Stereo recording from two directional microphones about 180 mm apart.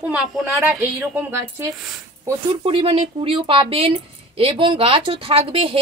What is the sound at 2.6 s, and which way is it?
Speech, 30° right (ahead or behind).